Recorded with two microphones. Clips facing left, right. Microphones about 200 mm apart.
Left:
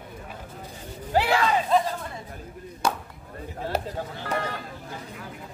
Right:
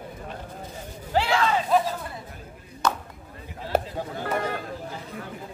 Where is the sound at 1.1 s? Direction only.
10° left (ahead or behind).